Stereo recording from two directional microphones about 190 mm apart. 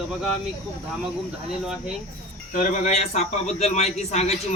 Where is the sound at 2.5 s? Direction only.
35° left (ahead or behind).